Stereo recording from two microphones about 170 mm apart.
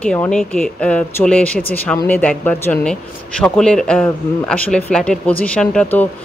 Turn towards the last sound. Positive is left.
turn(degrees=10)  # may be behind; listen again after turning